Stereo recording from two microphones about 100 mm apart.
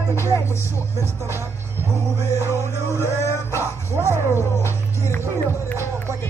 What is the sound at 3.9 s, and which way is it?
Speech, 25° right (ahead or behind).